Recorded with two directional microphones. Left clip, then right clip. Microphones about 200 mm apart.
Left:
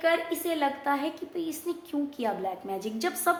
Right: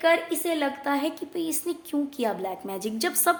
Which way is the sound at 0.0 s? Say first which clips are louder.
Right 4 dB; 55° right (ahead or behind).